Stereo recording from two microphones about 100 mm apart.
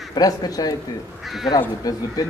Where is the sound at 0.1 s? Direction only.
40° left (ahead or behind).